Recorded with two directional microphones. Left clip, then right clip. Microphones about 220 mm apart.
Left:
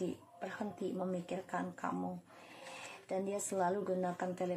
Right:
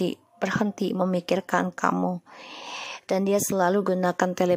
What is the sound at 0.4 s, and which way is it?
A woman's voice, 40° right (ahead or behind).